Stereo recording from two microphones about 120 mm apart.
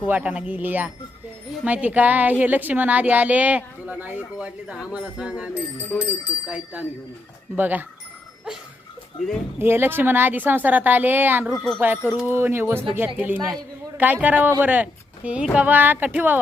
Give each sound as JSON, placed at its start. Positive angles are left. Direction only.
{"t": 0.1, "sound": "a woman's voice", "side_deg": -10}
{"t": 5.5, "sound": "speech", "side_deg": 20}
{"t": 7.5, "sound": "a woman's voice", "side_deg": -15}
{"t": 9.6, "sound": "a woman's voice", "side_deg": -20}
{"t": 11.5, "sound": "wind chime", "side_deg": 0}
{"t": 11.8, "sound": "a woman's voice", "side_deg": -15}